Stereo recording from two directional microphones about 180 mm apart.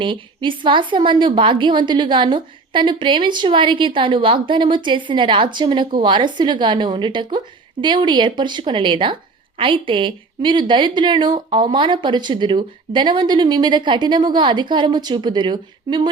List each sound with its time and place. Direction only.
0.0 s a woman's voice: 25° right (ahead or behind)